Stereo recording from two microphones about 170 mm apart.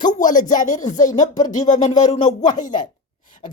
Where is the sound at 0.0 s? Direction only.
50° left (ahead or behind).